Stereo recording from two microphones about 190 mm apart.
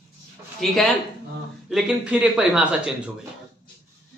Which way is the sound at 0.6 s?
Centre (ahead or behind).